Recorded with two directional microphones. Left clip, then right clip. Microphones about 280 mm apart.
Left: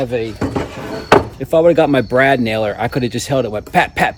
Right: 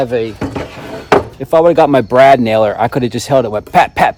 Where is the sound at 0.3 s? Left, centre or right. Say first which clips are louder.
Even; centre.